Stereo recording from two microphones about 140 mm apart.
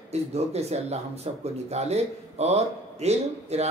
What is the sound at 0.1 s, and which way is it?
Speech, 50° right (ahead or behind).